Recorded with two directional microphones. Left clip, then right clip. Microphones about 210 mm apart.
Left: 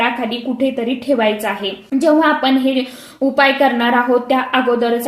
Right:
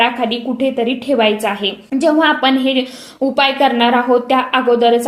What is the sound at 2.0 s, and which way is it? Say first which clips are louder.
A woman's voice: even; 25° right (ahead or behind).